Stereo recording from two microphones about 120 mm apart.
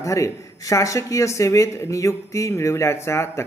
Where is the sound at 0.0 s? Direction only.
30° left (ahead or behind).